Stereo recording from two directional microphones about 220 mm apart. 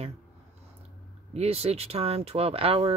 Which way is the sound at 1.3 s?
30° right (ahead or behind).